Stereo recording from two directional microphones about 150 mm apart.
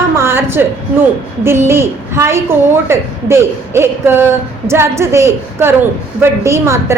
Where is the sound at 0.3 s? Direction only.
15° right (ahead or behind).